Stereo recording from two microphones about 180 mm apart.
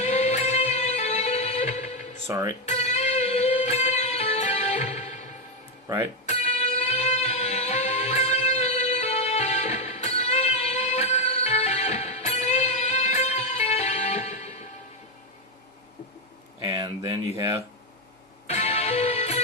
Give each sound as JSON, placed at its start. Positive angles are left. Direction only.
{"t": 0.0, "sound": "music", "side_deg": 40}
{"t": 2.2, "sound": "speech", "side_deg": -20}
{"t": 2.6, "sound": "music", "side_deg": 40}
{"t": 6.2, "sound": "music", "side_deg": 35}
{"t": 17.3, "sound": "speech", "side_deg": -15}
{"t": 18.4, "sound": "music", "side_deg": 40}